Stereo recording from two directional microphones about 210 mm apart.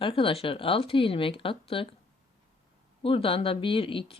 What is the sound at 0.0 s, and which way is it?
Speech, 25° left (ahead or behind).